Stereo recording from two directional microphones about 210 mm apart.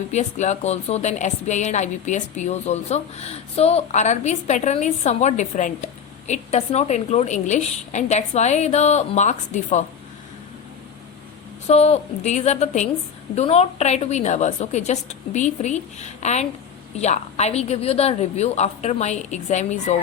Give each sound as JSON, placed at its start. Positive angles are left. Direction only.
{"t": 0.1, "sound": "a woman's voice", "side_deg": 35}
{"t": 11.7, "sound": "a woman's voice", "side_deg": 30}